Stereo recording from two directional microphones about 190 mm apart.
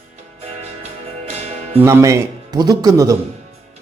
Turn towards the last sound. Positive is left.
turn(degrees=-20)  # may be behind; listen again after turning